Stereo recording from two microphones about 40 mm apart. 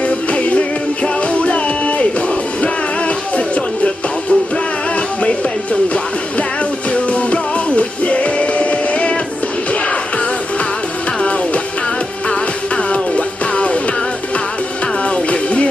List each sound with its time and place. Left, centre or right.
0.0 s music: left
6.9 s music: left
15.0 s music: left